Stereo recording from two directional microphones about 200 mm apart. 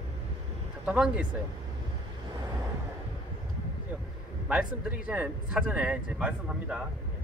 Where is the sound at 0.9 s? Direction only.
5° right (ahead or behind).